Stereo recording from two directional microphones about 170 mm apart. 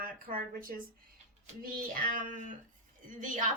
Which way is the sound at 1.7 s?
55° right (ahead or behind).